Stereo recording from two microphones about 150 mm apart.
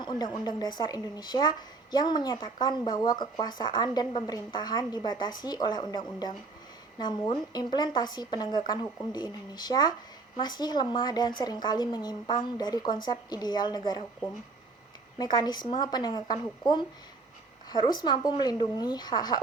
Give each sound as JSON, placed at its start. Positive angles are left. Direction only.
{"t": 0.0, "sound": "speech", "side_deg": 30}
{"t": 15.2, "sound": "speech", "side_deg": 25}